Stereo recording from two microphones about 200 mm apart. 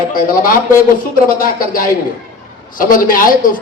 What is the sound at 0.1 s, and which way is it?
A man's voice, 45° left (ahead or behind).